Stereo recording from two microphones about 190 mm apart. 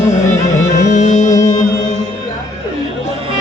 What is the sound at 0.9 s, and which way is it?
Music, 40° left (ahead or behind).